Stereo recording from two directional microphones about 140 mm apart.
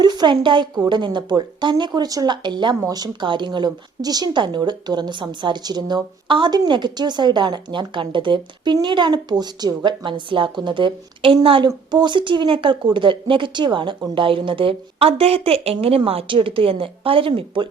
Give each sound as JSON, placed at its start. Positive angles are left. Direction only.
{"t": 0.0, "sound": "speech", "side_deg": -30}